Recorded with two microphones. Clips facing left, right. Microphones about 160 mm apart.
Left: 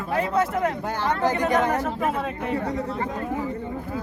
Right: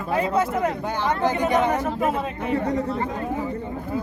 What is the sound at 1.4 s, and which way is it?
Speech, 20° right (ahead or behind).